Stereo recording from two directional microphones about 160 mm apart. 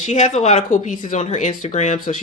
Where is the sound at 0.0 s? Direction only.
45° left (ahead or behind).